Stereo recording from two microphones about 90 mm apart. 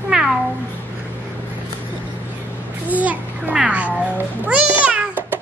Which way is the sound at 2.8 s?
15° right (ahead or behind).